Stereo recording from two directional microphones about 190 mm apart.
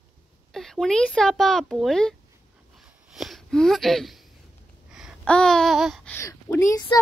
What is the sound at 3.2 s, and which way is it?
Speech, centre (ahead or behind).